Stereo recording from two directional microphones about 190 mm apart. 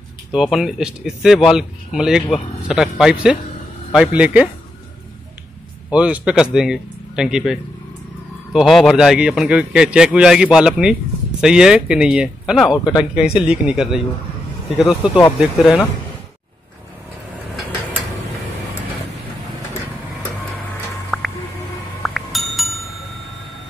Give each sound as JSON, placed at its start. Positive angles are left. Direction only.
{"t": 0.3, "sound": "a man's voice", "side_deg": 0}
{"t": 5.9, "sound": "a man's voice", "side_deg": -5}
{"t": 8.5, "sound": "a man's voice", "side_deg": 0}
{"t": 12.8, "sound": "speech", "side_deg": 20}
{"t": 13.2, "sound": "a man's voice", "side_deg": -5}
{"t": 21.1, "sound": "music", "side_deg": 0}